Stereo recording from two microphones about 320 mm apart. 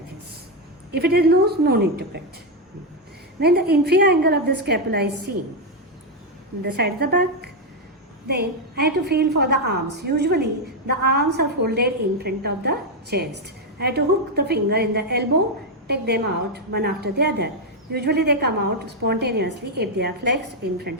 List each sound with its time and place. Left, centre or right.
0.9 s a woman's voice: right
3.4 s a woman's voice: right
6.7 s a woman's voice: right